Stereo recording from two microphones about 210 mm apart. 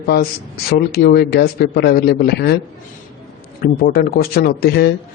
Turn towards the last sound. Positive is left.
turn(degrees=50)  # may be behind; listen again after turning